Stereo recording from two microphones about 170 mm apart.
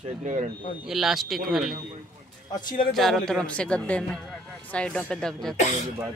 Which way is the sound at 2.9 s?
Centre (ahead or behind).